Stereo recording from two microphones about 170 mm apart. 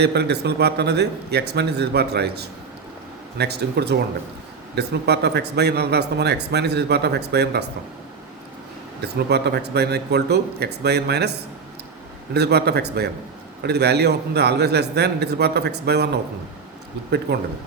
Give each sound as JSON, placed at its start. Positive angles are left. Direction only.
{"t": 0.0, "sound": "a man's voice", "side_deg": -70}
{"t": 9.0, "sound": "a man's voice", "side_deg": -75}
{"t": 17.3, "sound": "a man's voice", "side_deg": -75}